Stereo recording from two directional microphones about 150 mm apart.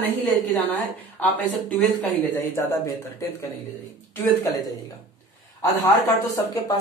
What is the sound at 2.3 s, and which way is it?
A woman's voice, 15° left (ahead or behind).